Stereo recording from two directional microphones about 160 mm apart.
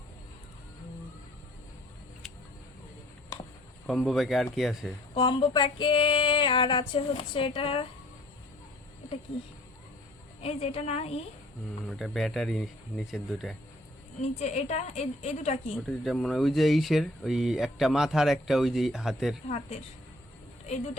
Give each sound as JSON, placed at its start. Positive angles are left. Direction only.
{"t": 3.8, "sound": "speech", "side_deg": 0}
{"t": 5.1, "sound": "a sound", "side_deg": 30}
{"t": 10.4, "sound": "a sound", "side_deg": 40}
{"t": 11.9, "sound": "speech", "side_deg": 0}
{"t": 14.3, "sound": "a woman's voice", "side_deg": 45}
{"t": 15.7, "sound": "speech", "side_deg": 0}
{"t": 19.5, "sound": "a woman's voice", "side_deg": 45}